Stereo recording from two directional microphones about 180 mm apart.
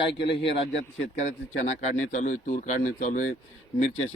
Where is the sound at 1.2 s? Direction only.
40° left (ahead or behind).